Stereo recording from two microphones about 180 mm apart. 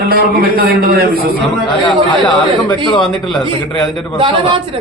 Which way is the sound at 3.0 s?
Centre (ahead or behind).